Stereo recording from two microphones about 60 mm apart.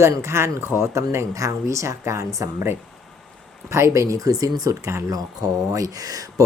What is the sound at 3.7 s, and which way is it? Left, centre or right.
Speech, right.